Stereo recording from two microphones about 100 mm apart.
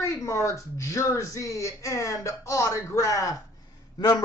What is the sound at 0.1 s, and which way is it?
Speech, 30° left (ahead or behind).